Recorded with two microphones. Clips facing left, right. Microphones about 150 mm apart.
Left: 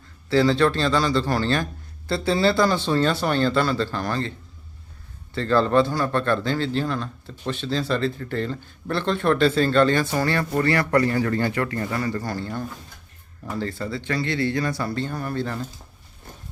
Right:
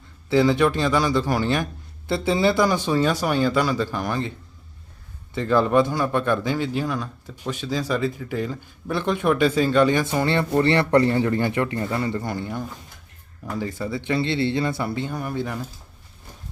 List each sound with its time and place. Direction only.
0.3 s a man's voice: 15° right (ahead or behind)
13.6 s speech: 15° right (ahead or behind)